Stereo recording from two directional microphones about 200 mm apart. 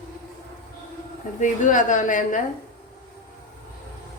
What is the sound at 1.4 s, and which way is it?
Speech, 40° left (ahead or behind).